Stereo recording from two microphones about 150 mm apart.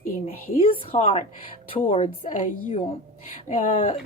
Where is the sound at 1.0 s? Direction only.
45° left (ahead or behind).